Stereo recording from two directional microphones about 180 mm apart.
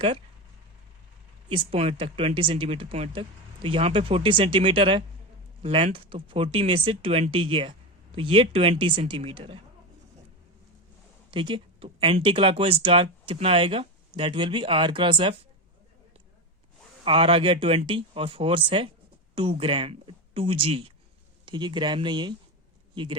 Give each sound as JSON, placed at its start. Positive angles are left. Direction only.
{"t": 1.5, "sound": "speech", "side_deg": -30}
{"t": 11.3, "sound": "speech", "side_deg": -25}
{"t": 17.0, "sound": "speech", "side_deg": -30}